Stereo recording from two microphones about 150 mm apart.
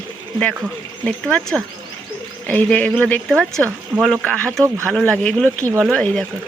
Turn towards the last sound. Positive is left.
turn(degrees=5)  # may be behind; listen again after turning